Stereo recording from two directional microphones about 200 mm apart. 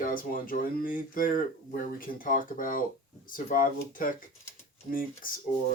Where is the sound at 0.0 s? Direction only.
45° left (ahead or behind).